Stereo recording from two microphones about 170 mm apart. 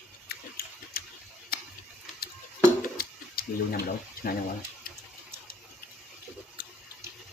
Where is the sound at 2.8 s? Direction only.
60° left (ahead or behind).